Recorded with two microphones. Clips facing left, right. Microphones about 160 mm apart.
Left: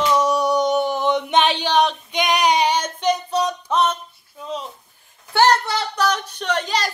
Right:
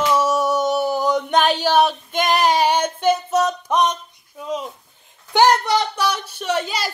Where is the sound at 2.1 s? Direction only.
Centre (ahead or behind).